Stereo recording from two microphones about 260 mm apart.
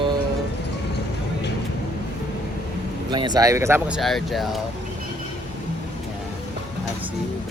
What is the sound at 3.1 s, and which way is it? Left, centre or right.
Speech, centre.